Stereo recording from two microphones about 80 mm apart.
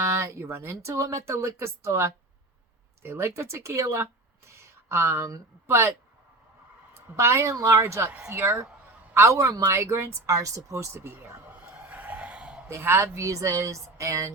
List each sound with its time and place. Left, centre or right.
0.0 s speech: right
7.2 s a woman's voice: right
9.6 s a sound: right; by 12.6 s centre
12.6 s speech: right